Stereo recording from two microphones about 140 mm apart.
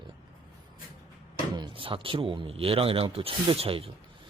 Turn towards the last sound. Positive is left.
turn(degrees=-40)  # may be behind; listen again after turning